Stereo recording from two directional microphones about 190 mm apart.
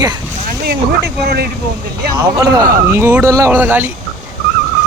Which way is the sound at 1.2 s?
55° right (ahead or behind).